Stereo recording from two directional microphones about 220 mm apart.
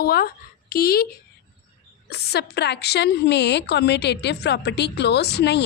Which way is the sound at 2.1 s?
50° left (ahead or behind).